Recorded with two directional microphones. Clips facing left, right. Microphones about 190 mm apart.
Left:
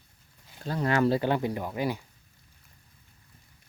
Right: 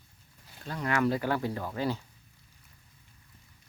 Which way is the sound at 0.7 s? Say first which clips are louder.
Left 4 dB; 30° left (ahead or behind).